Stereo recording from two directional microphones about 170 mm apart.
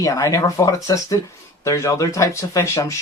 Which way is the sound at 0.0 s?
20° left (ahead or behind).